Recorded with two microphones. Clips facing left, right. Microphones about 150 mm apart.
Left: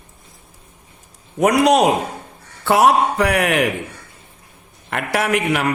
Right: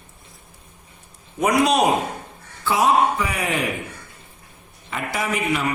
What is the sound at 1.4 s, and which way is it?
A man's voice, 70° left (ahead or behind).